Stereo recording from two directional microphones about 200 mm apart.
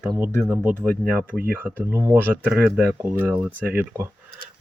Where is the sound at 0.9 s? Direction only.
5° left (ahead or behind).